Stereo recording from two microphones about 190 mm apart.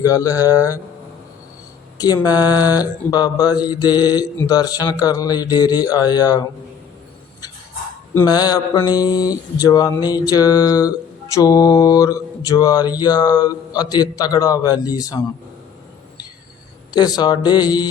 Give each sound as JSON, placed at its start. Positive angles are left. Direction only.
{"t": 0.0, "sound": "speech", "side_deg": 15}
{"t": 2.0, "sound": "mantra", "side_deg": 20}
{"t": 8.1, "sound": "mantra", "side_deg": 20}
{"t": 16.9, "sound": "mantra", "side_deg": 20}